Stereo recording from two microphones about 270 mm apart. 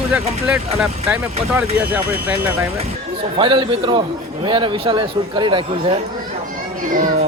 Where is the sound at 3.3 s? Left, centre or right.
Centre.